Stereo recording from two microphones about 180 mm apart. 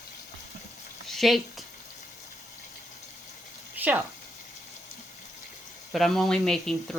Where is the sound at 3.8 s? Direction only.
10° right (ahead or behind).